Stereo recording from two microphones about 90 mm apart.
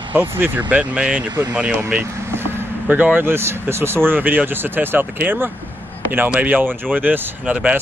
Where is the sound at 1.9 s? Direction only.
25° right (ahead or behind).